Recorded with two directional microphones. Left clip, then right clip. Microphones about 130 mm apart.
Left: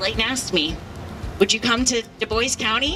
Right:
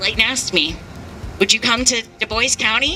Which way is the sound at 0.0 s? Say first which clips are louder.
Right 5 dB; 20° right (ahead or behind).